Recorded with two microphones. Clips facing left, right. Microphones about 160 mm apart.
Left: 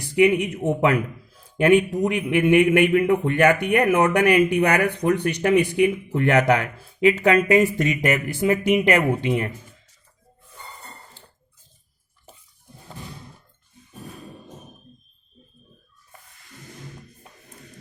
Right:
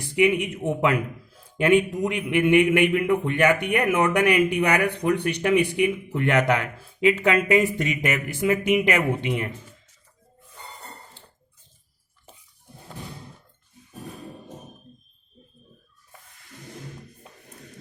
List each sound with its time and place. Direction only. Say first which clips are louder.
0.2 s a man's voice: left 3 dB; 40° left (ahead or behind)